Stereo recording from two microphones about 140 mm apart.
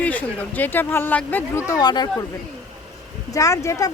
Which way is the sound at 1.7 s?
30° left (ahead or behind).